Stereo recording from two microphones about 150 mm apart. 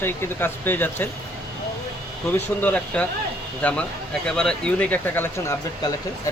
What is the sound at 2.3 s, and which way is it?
Speech, 10° left (ahead or behind).